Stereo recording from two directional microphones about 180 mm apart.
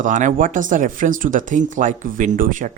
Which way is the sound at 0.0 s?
45° right (ahead or behind).